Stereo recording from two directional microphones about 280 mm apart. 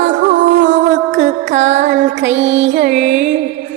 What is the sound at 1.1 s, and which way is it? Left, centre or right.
Music, right.